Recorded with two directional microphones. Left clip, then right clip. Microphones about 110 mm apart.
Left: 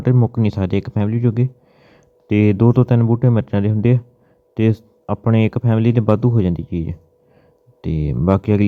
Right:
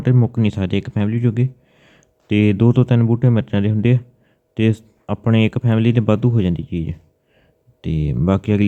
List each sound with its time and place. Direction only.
0.3 s speech: 35° left (ahead or behind)